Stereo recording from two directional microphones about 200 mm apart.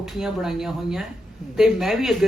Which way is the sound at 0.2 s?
Centre (ahead or behind).